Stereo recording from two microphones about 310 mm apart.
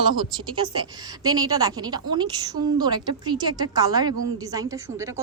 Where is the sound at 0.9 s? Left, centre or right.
Centre.